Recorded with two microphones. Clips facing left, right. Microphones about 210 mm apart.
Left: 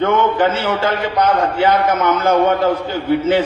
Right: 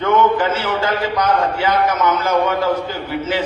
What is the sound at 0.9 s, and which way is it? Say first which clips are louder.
A man's voice: left 1 dB; 55° left (ahead or behind).